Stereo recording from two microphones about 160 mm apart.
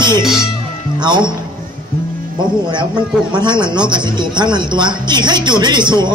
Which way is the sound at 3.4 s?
30° right (ahead or behind).